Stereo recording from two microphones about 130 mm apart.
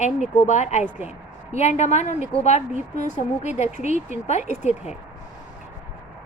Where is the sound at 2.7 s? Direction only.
90° right.